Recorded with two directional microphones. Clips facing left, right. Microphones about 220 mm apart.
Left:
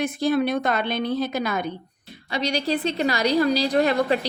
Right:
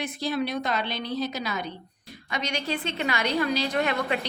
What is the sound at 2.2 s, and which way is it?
A woman's voice, 35° left (ahead or behind).